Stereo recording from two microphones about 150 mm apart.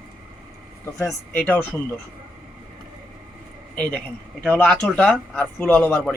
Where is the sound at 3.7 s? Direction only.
10° left (ahead or behind).